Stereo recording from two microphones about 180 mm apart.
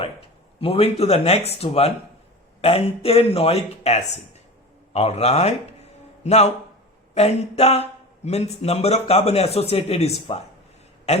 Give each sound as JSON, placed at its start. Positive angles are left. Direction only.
{"t": 0.6, "sound": "speech", "side_deg": 35}